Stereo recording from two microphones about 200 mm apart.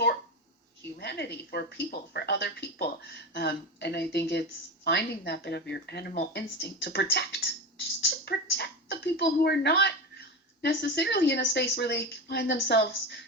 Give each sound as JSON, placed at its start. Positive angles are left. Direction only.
{"t": 0.8, "sound": "speech", "side_deg": 55}